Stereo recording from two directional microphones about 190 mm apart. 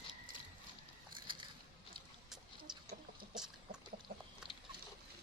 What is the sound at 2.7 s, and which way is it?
Chicken, 5° right (ahead or behind).